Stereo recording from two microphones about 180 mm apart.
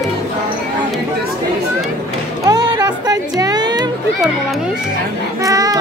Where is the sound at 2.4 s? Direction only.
20° right (ahead or behind).